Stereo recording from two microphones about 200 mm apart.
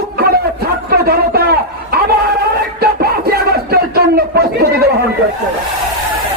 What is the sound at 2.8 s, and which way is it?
Music, 50° right (ahead or behind).